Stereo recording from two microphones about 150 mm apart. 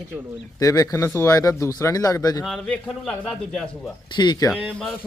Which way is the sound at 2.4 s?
5° left (ahead or behind).